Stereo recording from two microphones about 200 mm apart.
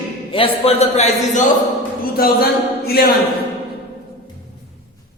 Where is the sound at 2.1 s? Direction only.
50° left (ahead or behind).